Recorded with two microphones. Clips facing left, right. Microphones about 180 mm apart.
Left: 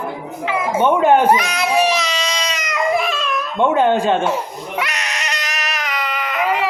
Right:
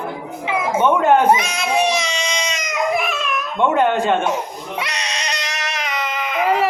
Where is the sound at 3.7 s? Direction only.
10° left (ahead or behind).